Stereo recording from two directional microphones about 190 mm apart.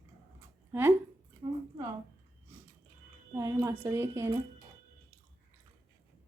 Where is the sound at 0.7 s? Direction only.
10° right (ahead or behind).